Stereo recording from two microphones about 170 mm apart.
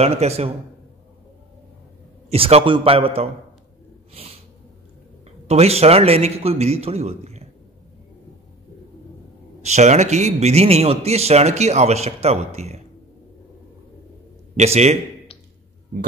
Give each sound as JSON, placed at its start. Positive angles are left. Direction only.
{"t": 0.0, "sound": "a man's voice", "side_deg": -40}
{"t": 2.2, "sound": "a man's voice", "side_deg": -35}
{"t": 4.1, "sound": "snort", "side_deg": -35}
{"t": 5.5, "sound": "a man's voice", "side_deg": -35}
{"t": 9.6, "sound": "a man's voice", "side_deg": -40}
{"t": 14.6, "sound": "a man's voice", "side_deg": -40}